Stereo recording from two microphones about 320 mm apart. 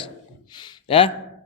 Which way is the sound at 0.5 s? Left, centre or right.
Centre.